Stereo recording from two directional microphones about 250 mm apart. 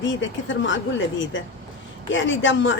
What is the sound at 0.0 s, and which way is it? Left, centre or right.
Speech, left.